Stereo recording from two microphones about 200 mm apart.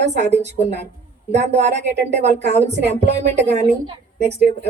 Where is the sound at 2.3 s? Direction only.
60° right (ahead or behind).